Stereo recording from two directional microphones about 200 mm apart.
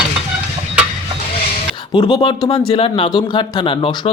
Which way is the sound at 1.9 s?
20° left (ahead or behind).